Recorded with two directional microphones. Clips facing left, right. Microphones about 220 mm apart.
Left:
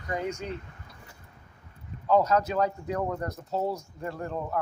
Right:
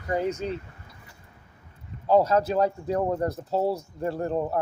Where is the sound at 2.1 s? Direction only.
30° right (ahead or behind).